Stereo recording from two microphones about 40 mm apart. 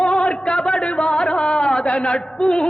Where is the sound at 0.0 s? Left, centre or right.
Left.